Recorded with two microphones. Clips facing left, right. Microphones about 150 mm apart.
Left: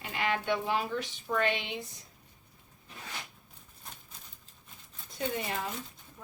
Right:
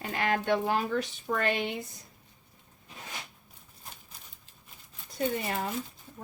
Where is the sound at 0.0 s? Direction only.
45° right (ahead or behind).